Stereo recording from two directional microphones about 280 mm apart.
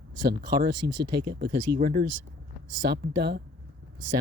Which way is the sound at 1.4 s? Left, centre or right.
Right.